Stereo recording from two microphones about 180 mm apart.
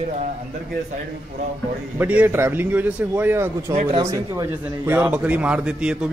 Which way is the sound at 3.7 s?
35° right (ahead or behind).